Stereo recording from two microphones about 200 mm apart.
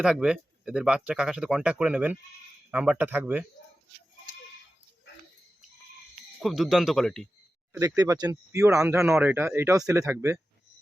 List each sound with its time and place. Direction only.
0.0 s speech: 5° right (ahead or behind)
6.4 s speech: centre (ahead or behind)
7.7 s speech: 15° right (ahead or behind)